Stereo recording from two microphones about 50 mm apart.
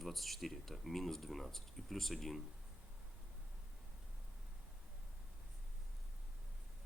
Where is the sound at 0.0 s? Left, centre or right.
Centre.